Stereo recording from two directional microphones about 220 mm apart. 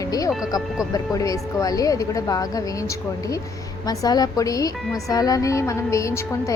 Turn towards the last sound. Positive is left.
turn(degrees=15)  # may be behind; listen again after turning